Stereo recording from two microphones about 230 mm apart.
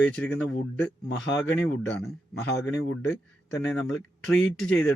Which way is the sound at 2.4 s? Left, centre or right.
Left.